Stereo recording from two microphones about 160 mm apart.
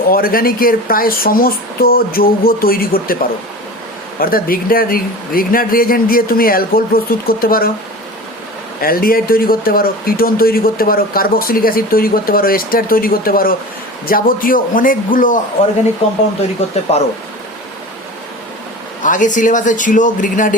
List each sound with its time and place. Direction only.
0.1 s a man's voice: 65° left (ahead or behind)
4.2 s a man's voice: 65° left (ahead or behind)
8.8 s a man's voice: 65° left (ahead or behind)
19.0 s speech: 55° left (ahead or behind)